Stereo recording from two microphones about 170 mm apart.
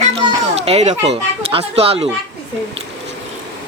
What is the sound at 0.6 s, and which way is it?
Speech, 40° right (ahead or behind).